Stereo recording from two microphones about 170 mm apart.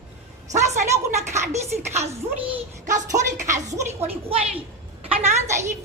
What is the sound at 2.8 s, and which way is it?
Speech, 45° right (ahead or behind).